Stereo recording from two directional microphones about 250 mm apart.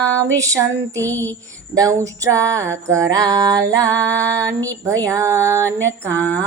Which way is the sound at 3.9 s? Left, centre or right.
Centre.